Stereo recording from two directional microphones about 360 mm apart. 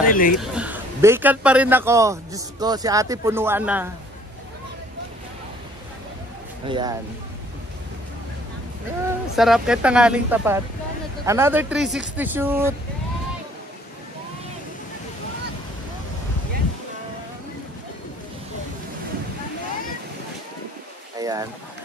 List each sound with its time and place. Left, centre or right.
0.0 s speech: left
0.4 s a man's voice: centre
6.7 s a man's voice: centre
9.0 s speech: centre
21.2 s boat: centre